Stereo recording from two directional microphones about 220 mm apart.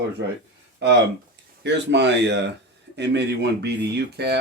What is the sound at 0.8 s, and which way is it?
Speech, 50° right (ahead or behind).